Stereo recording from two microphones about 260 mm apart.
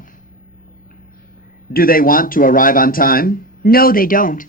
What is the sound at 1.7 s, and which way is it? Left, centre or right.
Speech, left.